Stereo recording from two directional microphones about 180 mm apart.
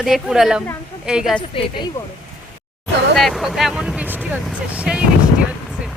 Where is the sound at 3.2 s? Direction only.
Centre (ahead or behind).